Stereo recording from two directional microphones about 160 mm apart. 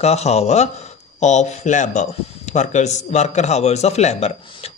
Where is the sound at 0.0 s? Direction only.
40° left (ahead or behind).